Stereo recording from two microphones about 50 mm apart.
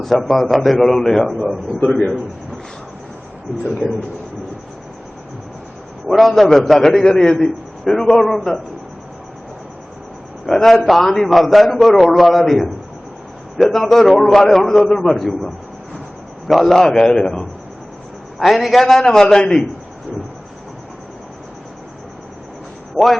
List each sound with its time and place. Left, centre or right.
0.1 s a man's voice: centre
3.7 s a man's voice: centre
6.1 s a man's voice: centre
10.4 s a man's voice: centre
13.7 s a man's voice: centre
16.5 s a man's voice: centre
23.0 s a man's voice: centre